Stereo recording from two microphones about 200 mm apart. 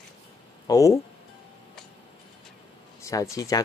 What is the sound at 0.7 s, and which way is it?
Speech, 15° left (ahead or behind).